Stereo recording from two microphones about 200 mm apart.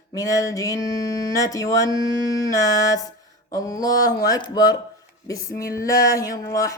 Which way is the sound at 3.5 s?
15° left (ahead or behind).